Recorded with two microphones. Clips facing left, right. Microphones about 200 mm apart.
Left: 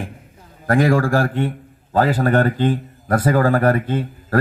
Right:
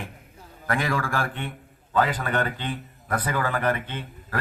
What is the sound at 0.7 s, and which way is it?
A man's voice, 40° left (ahead or behind).